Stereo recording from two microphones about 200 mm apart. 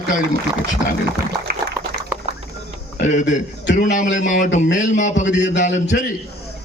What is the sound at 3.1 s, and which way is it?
A man's voice, 40° left (ahead or behind).